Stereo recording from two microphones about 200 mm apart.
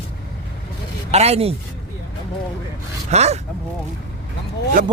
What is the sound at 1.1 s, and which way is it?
Speech, 30° right (ahead or behind).